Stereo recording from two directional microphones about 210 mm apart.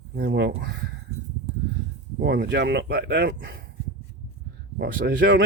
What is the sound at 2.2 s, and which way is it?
Speech, 50° right (ahead or behind).